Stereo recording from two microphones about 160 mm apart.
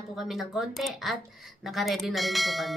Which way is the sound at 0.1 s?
Centre (ahead or behind).